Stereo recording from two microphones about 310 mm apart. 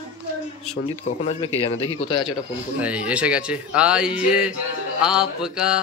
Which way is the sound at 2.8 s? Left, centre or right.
Centre.